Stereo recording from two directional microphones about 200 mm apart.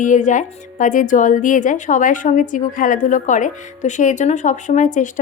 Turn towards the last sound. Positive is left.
turn(degrees=40)  # may be behind; listen again after turning